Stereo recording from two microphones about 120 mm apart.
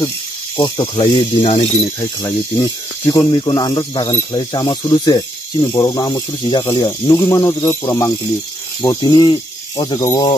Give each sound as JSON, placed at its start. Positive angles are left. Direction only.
{"t": 0.6, "sound": "speech", "side_deg": 40}
{"t": 2.0, "sound": "speech", "side_deg": 25}
{"t": 5.6, "sound": "speech", "side_deg": 20}
{"t": 5.9, "sound": "speech", "side_deg": 35}
{"t": 6.6, "sound": "speech", "side_deg": 20}
{"t": 9.1, "sound": "speech", "side_deg": 40}
{"t": 9.9, "sound": "speech", "side_deg": 30}